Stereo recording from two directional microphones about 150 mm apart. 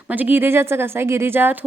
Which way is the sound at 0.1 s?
10° right (ahead or behind).